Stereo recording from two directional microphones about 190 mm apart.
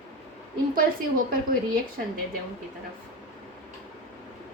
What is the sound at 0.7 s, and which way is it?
A woman's voice, 50° right (ahead or behind).